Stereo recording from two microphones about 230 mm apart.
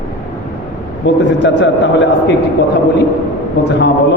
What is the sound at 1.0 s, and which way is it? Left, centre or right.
A man's voice, left.